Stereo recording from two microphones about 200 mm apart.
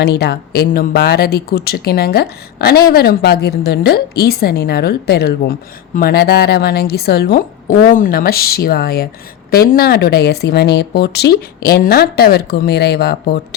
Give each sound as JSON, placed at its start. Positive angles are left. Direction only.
{"t": 0.0, "sound": "speech", "side_deg": 55}